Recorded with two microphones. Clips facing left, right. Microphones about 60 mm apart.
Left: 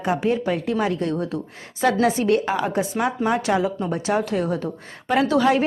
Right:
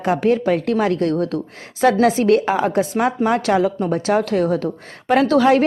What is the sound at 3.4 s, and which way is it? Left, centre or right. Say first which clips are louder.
Speech: right 4 dB; right.